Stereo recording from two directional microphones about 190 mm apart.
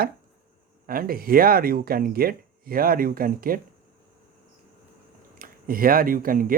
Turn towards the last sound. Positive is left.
turn(degrees=-50)  # may be behind; listen again after turning